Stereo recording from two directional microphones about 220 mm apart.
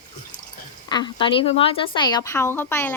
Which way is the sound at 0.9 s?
20° left (ahead or behind).